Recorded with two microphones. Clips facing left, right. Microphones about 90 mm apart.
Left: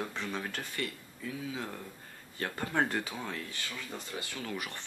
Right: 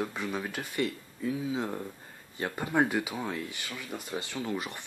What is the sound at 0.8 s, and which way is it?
Speech, 20° right (ahead or behind).